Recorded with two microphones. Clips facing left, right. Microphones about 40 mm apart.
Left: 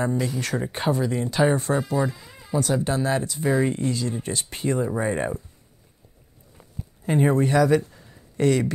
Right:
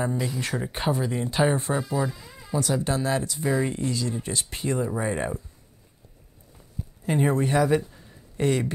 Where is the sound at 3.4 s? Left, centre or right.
Centre.